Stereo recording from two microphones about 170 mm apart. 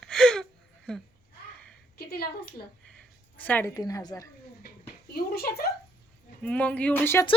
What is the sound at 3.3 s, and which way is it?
Speech, 10° left (ahead or behind).